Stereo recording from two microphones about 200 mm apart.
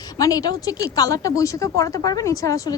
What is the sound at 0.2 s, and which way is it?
A woman's voice, 20° left (ahead or behind).